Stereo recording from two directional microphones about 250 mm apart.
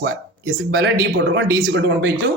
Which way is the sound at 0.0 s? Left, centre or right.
Right.